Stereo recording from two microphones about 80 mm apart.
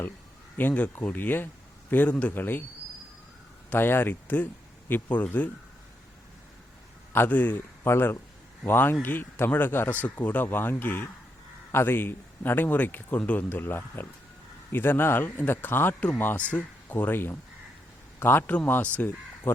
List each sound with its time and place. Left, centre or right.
0.5 s a man's voice: left
3.7 s a man's voice: left
7.1 s a man's voice: left
7.9 s a man's voice: left